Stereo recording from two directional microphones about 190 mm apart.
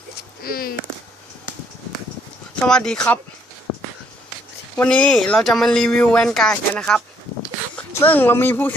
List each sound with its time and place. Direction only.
0.4 s speech: 50° left (ahead or behind)
2.6 s speech: 5° left (ahead or behind)
4.8 s speech: 5° left (ahead or behind)